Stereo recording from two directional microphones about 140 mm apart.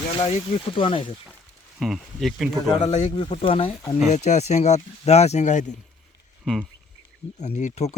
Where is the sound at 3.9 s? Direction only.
55° left (ahead or behind).